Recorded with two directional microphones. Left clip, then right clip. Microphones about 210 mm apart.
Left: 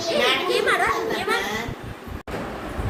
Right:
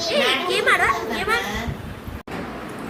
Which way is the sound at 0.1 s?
25° right (ahead or behind).